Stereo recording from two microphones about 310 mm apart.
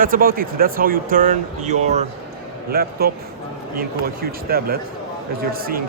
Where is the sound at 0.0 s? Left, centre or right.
Right.